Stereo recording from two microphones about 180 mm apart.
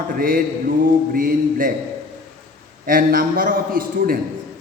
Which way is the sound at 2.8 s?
50° right (ahead or behind).